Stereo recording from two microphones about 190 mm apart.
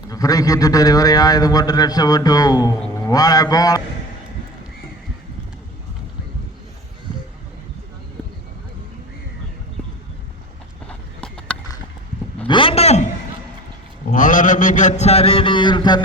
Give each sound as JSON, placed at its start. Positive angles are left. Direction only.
{"t": 0.1, "sound": "a man's voice", "side_deg": 20}
{"t": 10.8, "sound": "horse", "side_deg": 5}
{"t": 12.5, "sound": "a sound", "side_deg": 25}
{"t": 14.1, "sound": "mantra", "side_deg": 45}